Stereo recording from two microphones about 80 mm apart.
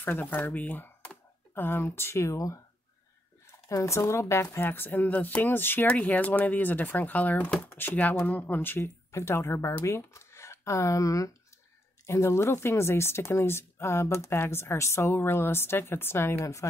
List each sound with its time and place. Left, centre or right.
0.0 s speech: left
2.3 s speech: left
3.6 s speech: left